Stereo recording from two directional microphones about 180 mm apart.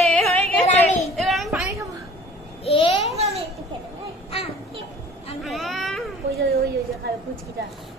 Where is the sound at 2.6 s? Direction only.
30° left (ahead or behind).